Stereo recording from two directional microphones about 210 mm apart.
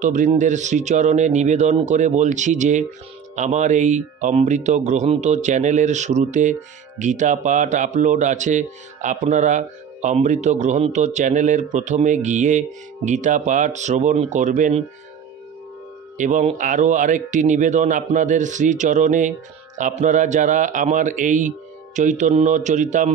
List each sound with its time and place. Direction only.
0.0 s speech: 35° right (ahead or behind)
16.2 s speech: 35° right (ahead or behind)